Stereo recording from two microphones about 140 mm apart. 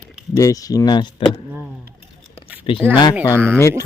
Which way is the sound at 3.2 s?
15° right (ahead or behind).